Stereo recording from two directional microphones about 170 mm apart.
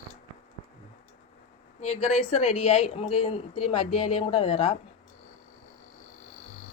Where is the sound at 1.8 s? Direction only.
40° left (ahead or behind).